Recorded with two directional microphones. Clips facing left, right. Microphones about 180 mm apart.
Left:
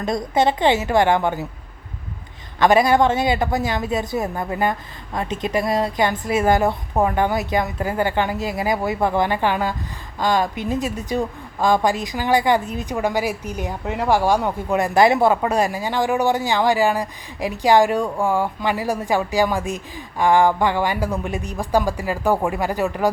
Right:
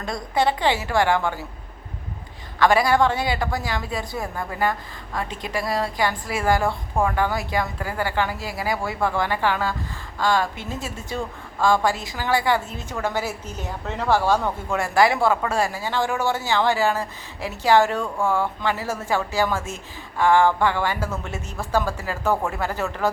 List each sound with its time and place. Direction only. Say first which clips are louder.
0.0 s a woman's voice: left 4 dB; 20° left (ahead or behind)
2.6 s a woman's voice: left 3 dB; 20° left (ahead or behind)